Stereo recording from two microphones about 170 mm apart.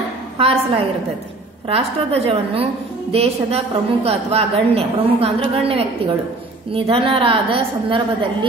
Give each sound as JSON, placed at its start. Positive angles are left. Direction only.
{"t": 0.4, "sound": "a woman's voice", "side_deg": -35}